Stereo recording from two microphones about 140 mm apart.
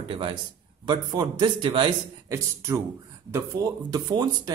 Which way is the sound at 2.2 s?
20° right (ahead or behind).